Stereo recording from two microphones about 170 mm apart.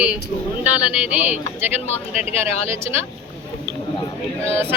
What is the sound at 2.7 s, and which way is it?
Speech, 15° right (ahead or behind).